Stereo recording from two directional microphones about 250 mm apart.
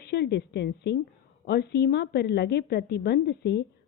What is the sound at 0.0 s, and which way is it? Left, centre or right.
A woman's voice, left.